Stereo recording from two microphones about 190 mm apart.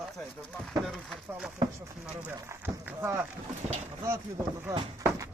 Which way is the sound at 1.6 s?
15° right (ahead or behind).